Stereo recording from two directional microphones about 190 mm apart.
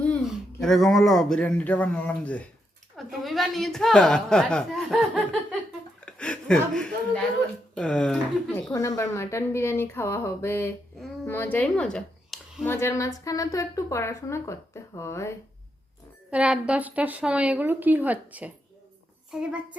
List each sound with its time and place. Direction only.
0.3 s a woman's voice: centre (ahead or behind)
8.7 s a woman's voice: 20° left (ahead or behind); by 12.6 s centre (ahead or behind)
12.6 s a woman's voice: 15° left (ahead or behind)
16.3 s a woman's voice: 5° right (ahead or behind)